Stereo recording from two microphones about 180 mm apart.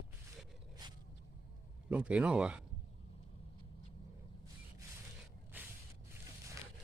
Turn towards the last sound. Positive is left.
turn(degrees=-10)  # may be behind; listen again after turning